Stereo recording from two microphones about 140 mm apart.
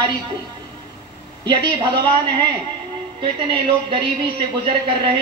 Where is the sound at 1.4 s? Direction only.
35° right (ahead or behind).